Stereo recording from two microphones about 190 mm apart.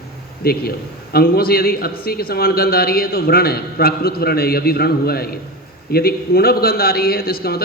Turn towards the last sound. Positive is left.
turn(degrees=55)  # may be behind; listen again after turning